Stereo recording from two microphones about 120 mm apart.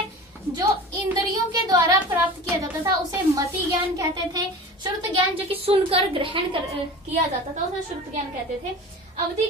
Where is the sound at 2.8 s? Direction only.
30° right (ahead or behind).